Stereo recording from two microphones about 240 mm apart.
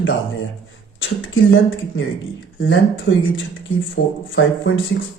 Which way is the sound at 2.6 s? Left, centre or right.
Left.